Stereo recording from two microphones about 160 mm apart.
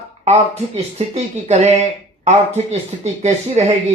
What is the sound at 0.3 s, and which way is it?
Speech, 40° right (ahead or behind).